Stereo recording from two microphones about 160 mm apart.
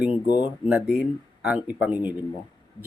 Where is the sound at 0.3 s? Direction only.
25° left (ahead or behind).